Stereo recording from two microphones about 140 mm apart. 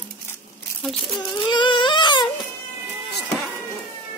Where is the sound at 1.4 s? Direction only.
35° left (ahead or behind).